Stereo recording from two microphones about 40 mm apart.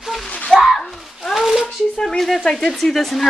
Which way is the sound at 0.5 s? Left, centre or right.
Left.